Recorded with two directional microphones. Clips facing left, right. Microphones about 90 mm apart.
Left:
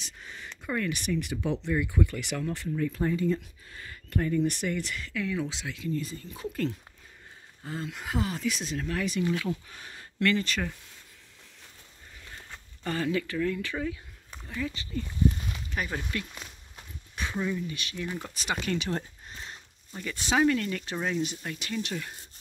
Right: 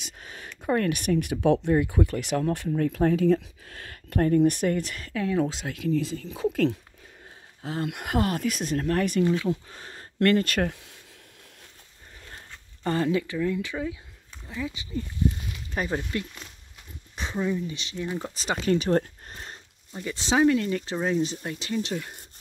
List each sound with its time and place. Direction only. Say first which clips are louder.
0.2 s a sound: right 1 dB; 55° right (ahead or behind)
0.7 s speech: right 6 dB; 50° right (ahead or behind)
1.7 s speech: right 5 dB; 45° right (ahead or behind)
2.9 s speech: right 8 dB; 75° right (ahead or behind); by 5.8 s 50° right (ahead or behind)
5.8 s speech: right 7 dB; 90° right
7.6 s speech: right 5 dB; 65° right (ahead or behind); by 9.3 s 50° right (ahead or behind)
9.7 s speech: right 3 dB; 30° right (ahead or behind)
10.1 s speech: right 5 dB; 50° right (ahead or behind)
12.8 s speech: right 4 dB; 30° right (ahead or behind)
15.7 s speech: right 5 dB; 30° right (ahead or behind)
17.1 s a sound: right 1 dB; 25° right (ahead or behind)
17.4 s speech: right 4 dB; 20° right (ahead or behind)
18.3 s speech: right 7 dB; 30° right (ahead or behind); by 19.5 s 45° right (ahead or behind)
20.0 s speech: right 3 dB; 20° right (ahead or behind)